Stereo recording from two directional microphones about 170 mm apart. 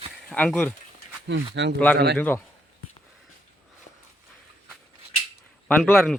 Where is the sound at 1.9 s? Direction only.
75° right (ahead or behind).